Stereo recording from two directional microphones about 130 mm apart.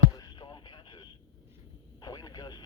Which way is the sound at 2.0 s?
30° left (ahead or behind).